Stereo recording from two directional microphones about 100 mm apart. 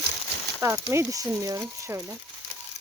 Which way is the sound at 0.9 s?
30° right (ahead or behind).